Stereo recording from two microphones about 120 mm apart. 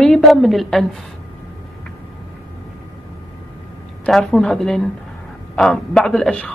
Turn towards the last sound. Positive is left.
turn(degrees=5)  # may be behind; listen again after turning